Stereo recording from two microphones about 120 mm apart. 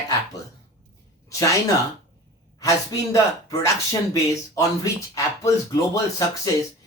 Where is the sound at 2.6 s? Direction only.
25° left (ahead or behind).